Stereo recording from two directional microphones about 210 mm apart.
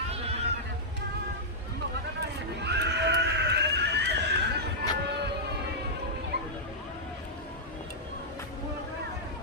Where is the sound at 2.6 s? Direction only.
55° right (ahead or behind).